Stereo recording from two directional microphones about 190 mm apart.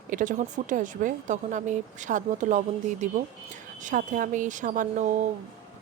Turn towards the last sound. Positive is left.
turn(degrees=-40)  # may be behind; listen again after turning